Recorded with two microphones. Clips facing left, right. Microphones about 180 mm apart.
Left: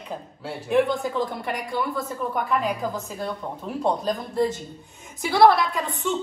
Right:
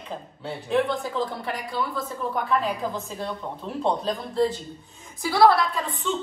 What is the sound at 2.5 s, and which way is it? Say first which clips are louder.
A woman's voice: right 1 dB; 5° left (ahead or behind).